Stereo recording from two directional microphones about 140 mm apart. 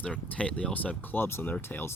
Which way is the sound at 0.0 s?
10° left (ahead or behind).